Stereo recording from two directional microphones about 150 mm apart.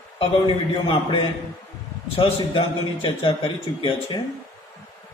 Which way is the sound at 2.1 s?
35° left (ahead or behind).